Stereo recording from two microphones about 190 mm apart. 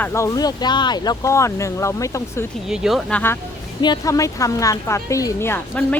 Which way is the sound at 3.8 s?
20° left (ahead or behind).